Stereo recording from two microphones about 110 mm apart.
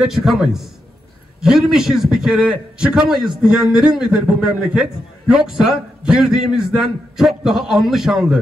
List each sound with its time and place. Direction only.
0.0 s a man's voice: centre (ahead or behind)